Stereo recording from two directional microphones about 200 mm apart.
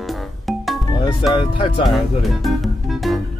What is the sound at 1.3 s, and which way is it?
Speech, 25° left (ahead or behind).